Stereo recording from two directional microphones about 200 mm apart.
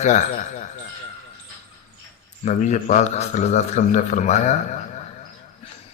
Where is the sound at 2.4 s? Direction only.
35° left (ahead or behind).